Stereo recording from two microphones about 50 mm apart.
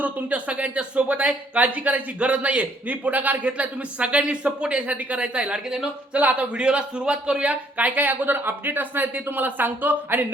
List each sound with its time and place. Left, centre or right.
0.0 s speech: right
6.1 s a man's voice: right